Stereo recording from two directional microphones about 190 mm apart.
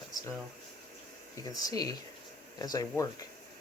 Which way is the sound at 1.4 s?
20° left (ahead or behind).